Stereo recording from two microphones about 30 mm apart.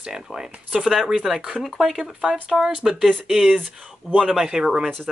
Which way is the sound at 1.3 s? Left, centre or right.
Centre.